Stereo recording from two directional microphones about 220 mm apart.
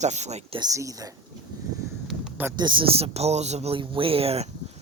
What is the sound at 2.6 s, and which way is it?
Speech, 20° right (ahead or behind).